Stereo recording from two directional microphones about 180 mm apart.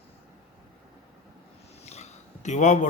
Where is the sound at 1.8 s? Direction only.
40° left (ahead or behind).